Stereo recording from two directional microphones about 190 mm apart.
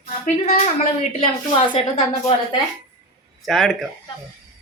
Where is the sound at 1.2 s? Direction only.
30° left (ahead or behind).